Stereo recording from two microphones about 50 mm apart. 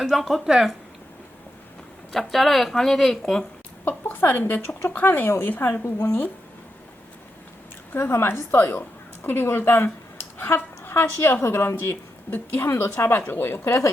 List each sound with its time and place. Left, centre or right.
0.0 s a woman's voice: centre
2.1 s a woman's voice: centre
3.8 s a sound: left
4.3 s speech: left
7.9 s a woman's voice: left